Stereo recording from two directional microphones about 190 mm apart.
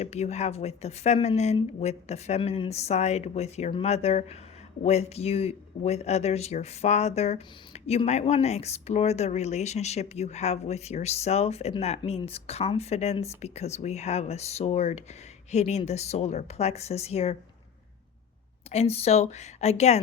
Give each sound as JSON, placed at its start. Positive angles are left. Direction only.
{"t": 0.0, "sound": "speech", "side_deg": 35}
{"t": 18.7, "sound": "speech", "side_deg": 35}